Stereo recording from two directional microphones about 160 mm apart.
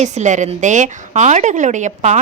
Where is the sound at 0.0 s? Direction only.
45° right (ahead or behind).